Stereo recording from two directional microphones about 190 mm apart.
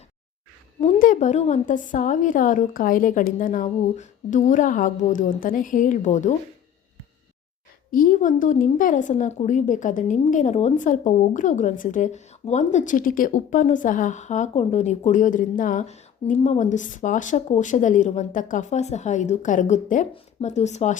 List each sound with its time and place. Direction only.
0.8 s a woman's voice: 40° left (ahead or behind)
7.9 s a woman's voice: 45° left (ahead or behind)